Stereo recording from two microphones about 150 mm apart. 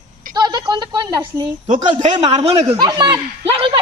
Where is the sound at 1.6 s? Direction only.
55° right (ahead or behind).